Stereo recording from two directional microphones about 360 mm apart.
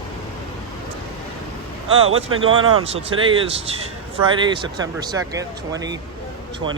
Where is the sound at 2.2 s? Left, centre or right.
Right.